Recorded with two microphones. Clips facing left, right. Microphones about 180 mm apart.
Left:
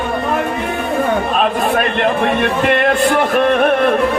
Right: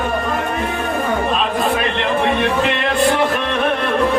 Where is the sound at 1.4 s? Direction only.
50° left (ahead or behind).